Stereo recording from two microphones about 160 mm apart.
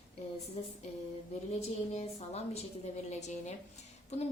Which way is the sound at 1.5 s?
40° left (ahead or behind).